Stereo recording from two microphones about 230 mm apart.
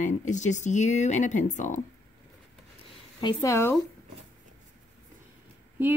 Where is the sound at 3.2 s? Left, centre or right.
Centre.